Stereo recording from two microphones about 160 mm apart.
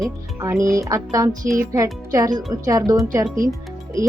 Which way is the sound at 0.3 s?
20° right (ahead or behind).